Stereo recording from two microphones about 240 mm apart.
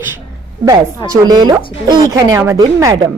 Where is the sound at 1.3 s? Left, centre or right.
Centre.